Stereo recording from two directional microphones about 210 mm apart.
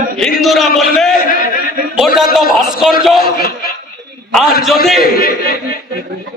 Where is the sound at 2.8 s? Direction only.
Centre (ahead or behind).